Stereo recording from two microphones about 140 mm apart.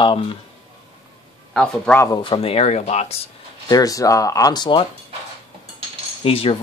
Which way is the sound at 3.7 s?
25° left (ahead or behind).